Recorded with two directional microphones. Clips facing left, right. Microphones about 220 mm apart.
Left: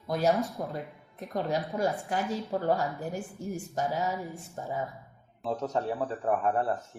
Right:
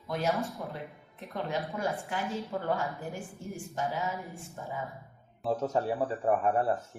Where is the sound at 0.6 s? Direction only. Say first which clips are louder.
Left 4 dB; 40° left (ahead or behind).